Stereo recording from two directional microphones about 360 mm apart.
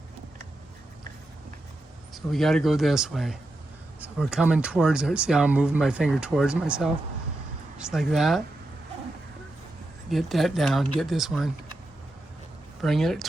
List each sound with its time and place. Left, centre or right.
2.1 s speech: centre
10.1 s speech: centre
12.8 s speech: centre